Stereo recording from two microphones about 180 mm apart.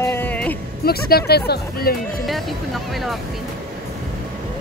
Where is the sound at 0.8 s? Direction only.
60° left (ahead or behind).